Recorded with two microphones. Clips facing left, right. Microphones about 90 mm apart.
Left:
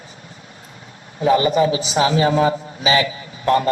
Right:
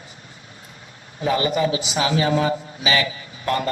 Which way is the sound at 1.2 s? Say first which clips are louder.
Left 5 dB; 30° left (ahead or behind).